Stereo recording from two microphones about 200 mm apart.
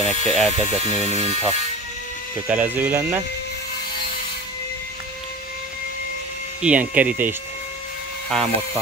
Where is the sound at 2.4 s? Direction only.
10° right (ahead or behind).